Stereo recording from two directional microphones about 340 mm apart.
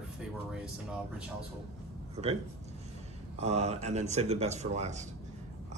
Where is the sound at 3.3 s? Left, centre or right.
Centre.